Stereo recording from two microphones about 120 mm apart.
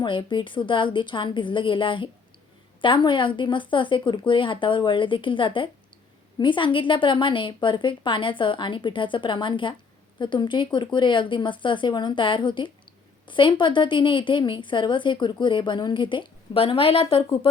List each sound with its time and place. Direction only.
0.0 s a woman's voice: 40° left (ahead or behind)